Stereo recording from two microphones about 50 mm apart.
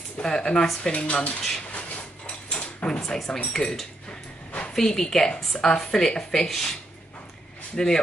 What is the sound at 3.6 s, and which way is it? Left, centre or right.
Speech, left.